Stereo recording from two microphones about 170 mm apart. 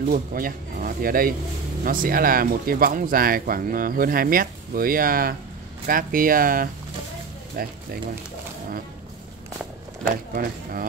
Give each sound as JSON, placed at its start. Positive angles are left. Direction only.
{"t": 0.1, "sound": "speech", "side_deg": -55}
{"t": 10.3, "sound": "speech", "side_deg": -55}